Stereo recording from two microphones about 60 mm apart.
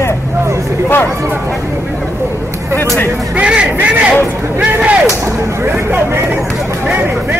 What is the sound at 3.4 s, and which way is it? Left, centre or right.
Speech, centre.